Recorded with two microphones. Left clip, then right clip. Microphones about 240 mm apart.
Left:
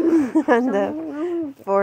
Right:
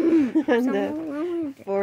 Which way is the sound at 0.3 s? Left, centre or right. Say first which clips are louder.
Left 4 dB; left.